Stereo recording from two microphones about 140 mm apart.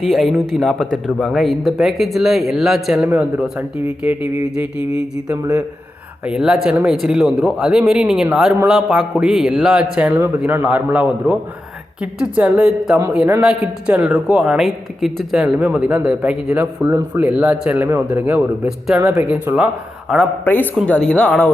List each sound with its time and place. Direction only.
0.0 s a man's voice: centre (ahead or behind)
4.8 s a sound: 45° left (ahead or behind)
5.3 s a man's voice: 25° right (ahead or behind)
6.2 s a man's voice: 5° right (ahead or behind)
20.4 s a woman's voice: 15° left (ahead or behind)